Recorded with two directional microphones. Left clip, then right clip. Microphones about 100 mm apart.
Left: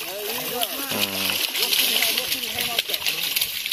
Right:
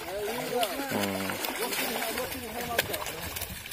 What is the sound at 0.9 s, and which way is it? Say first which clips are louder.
Splash: left 6 dB; 5° left (ahead or behind).